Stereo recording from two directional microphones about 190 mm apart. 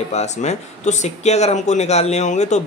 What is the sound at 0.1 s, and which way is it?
Speech, 35° left (ahead or behind).